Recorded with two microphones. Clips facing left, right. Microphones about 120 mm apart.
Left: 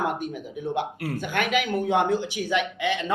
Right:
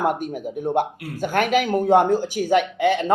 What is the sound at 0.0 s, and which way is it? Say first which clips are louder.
Speech: right 5 dB; 45° right (ahead or behind).